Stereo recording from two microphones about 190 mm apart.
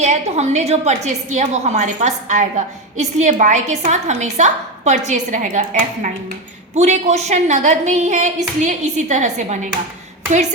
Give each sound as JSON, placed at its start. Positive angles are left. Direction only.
{"t": 0.0, "sound": "a woman's voice", "side_deg": -35}